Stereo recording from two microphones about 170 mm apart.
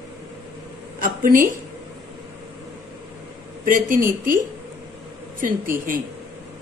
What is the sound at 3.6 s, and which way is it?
Speech, 50° right (ahead or behind).